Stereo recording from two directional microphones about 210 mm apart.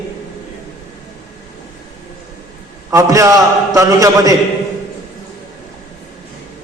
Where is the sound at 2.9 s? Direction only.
15° right (ahead or behind).